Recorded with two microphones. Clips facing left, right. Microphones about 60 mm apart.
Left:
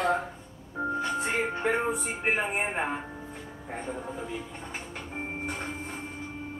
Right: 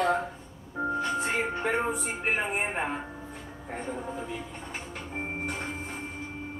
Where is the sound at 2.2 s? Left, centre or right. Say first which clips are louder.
Left 1 dB; centre.